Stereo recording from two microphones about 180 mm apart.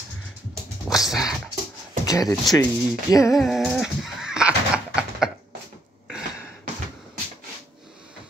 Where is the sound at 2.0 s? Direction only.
20° left (ahead or behind).